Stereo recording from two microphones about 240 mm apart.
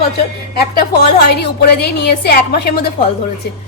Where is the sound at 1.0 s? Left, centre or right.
Left.